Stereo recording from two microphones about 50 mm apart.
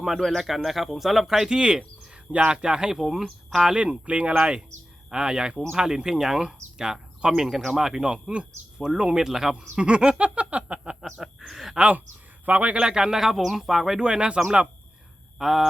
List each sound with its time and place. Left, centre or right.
0.2 s speech: centre
9.7 s speech: right
11.0 s speech: centre
11.8 s speech: right
12.9 s speech: centre
14.0 s speech: centre
15.4 s speech: centre